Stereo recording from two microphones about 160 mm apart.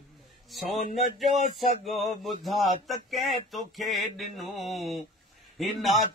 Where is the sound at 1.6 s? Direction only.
50° left (ahead or behind).